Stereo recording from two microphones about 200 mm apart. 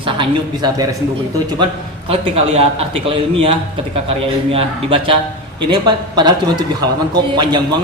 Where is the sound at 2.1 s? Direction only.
30° right (ahead or behind).